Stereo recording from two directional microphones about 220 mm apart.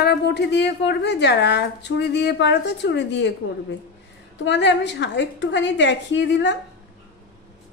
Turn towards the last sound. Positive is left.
turn(degrees=55)  # may be behind; listen again after turning